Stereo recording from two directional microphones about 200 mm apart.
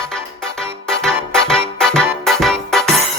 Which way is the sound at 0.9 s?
5° left (ahead or behind).